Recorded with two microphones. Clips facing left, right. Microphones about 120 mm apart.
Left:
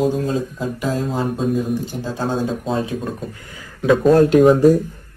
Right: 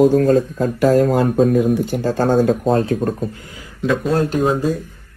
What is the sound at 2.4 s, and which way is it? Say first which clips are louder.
Speech: right 6 dB; 50° right (ahead or behind).